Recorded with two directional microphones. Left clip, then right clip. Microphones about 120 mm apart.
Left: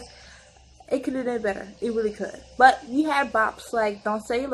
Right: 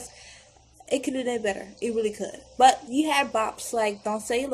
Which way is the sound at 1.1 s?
35° right (ahead or behind).